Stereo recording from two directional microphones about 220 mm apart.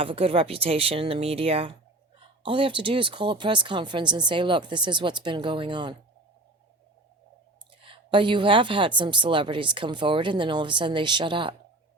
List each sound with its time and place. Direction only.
0.0 s a woman's voice: 25° right (ahead or behind)
7.8 s a woman's voice: 25° right (ahead or behind)